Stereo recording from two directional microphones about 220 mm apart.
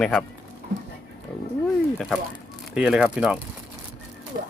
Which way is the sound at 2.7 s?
5° right (ahead or behind).